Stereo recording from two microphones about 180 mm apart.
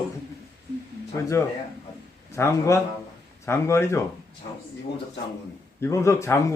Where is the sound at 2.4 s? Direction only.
15° left (ahead or behind).